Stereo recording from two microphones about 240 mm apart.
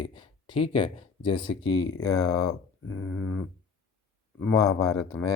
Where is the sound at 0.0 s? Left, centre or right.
Centre.